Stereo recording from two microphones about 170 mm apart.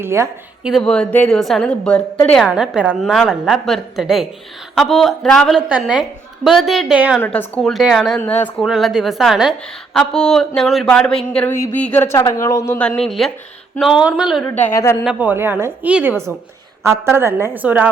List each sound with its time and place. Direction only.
0.0 s a woman's voice: 15° right (ahead or behind)
0.6 s a woman's voice: centre (ahead or behind)
2.5 s a woman's voice: 5° right (ahead or behind)
7.2 s a woman's voice: 10° left (ahead or behind)
8.2 s a woman's voice: 10° left (ahead or behind)
8.6 s a woman's voice: centre (ahead or behind)
14.6 s a woman's voice: 15° left (ahead or behind)
15.0 s a woman's voice: 10° right (ahead or behind)